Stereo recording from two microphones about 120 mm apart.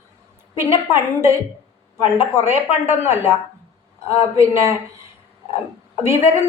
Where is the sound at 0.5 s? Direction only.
20° right (ahead or behind).